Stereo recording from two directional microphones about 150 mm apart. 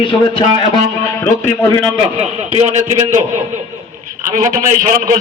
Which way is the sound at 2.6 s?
50° right (ahead or behind).